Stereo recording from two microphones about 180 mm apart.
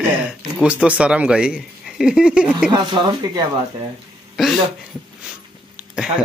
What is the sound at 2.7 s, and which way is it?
Speech, 25° right (ahead or behind).